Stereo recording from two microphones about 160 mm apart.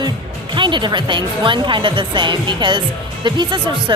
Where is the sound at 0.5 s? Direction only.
30° right (ahead or behind).